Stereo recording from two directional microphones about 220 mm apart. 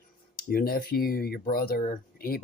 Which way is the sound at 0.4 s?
40° left (ahead or behind).